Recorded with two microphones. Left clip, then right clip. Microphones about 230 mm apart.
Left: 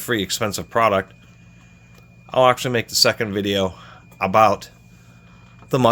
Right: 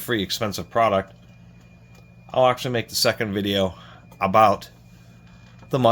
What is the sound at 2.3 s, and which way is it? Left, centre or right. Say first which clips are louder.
Speech: left 3 dB; left.